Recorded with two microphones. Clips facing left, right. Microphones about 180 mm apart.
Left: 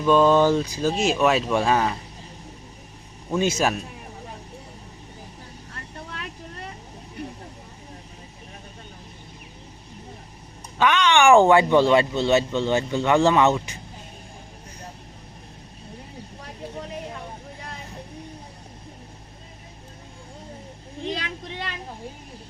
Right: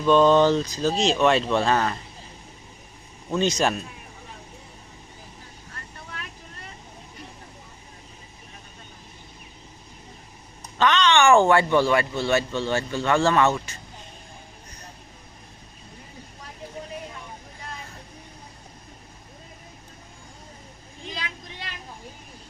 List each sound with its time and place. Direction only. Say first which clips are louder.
0.0 s speech: even; 5° left (ahead or behind)
3.2 s speech: left 1 dB; 5° left (ahead or behind)
7.2 s vehicle: left 10 dB; 60° left (ahead or behind)
10.8 s speech: left 1 dB; 10° left (ahead or behind)
21.1 s a sound: left 6 dB; 60° left (ahead or behind)